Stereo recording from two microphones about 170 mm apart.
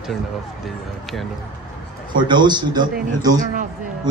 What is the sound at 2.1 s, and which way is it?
A man's voice, 25° right (ahead or behind).